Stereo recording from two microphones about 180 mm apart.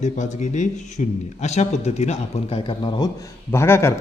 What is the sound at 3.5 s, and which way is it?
Speech, 15° left (ahead or behind).